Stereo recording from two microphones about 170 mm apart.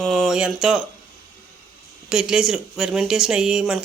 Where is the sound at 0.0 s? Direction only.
Centre (ahead or behind).